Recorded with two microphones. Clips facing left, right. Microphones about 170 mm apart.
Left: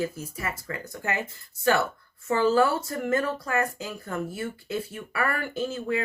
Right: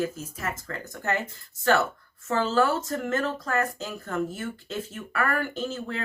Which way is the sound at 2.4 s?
10° left (ahead or behind).